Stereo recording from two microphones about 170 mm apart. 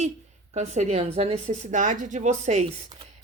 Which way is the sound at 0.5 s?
40° right (ahead or behind).